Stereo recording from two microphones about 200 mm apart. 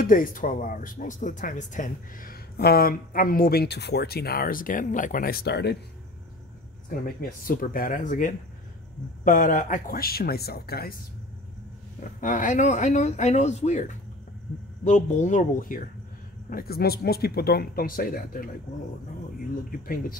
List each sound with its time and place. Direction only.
0.0 s speech: 40° left (ahead or behind)
6.9 s speech: 45° left (ahead or behind)
12.0 s speech: 40° left (ahead or behind)
19.7 s speech: 45° left (ahead or behind)